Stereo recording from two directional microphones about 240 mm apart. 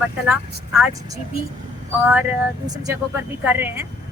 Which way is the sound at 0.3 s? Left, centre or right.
Centre.